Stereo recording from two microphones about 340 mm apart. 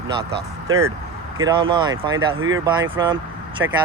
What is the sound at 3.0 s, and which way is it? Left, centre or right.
Speech, centre.